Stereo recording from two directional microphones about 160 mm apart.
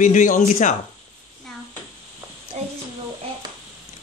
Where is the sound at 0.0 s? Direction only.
55° left (ahead or behind).